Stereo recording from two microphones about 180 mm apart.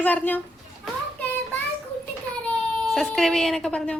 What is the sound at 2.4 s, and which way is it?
Speech, centre (ahead or behind).